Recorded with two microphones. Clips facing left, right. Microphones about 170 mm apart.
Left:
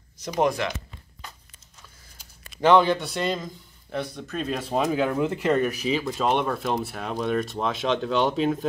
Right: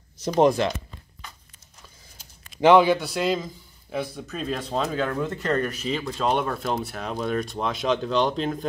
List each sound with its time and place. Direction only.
0.2 s speech: 30° right (ahead or behind)
2.6 s a man's voice: 10° right (ahead or behind)